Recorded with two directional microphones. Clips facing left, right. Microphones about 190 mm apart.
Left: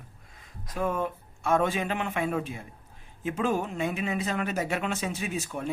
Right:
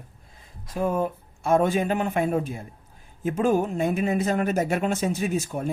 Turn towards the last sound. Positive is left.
turn(degrees=-40)  # may be behind; listen again after turning